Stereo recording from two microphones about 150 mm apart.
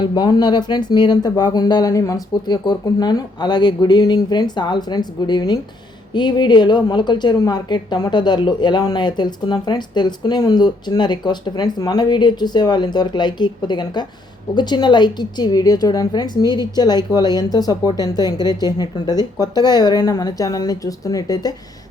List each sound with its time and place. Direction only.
0.0 s a woman's voice: 30° left (ahead or behind)